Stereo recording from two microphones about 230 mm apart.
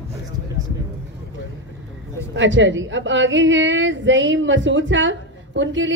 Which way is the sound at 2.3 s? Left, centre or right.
Right.